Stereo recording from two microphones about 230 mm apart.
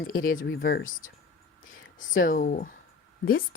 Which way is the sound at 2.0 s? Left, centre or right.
Left.